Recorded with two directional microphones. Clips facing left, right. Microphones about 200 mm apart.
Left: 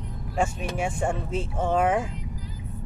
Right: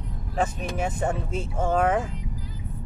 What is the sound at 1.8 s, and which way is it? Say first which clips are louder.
Speech: even; 5° left (ahead or behind).